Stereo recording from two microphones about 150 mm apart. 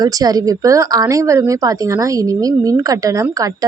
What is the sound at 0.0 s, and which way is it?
A woman's voice, 25° right (ahead or behind).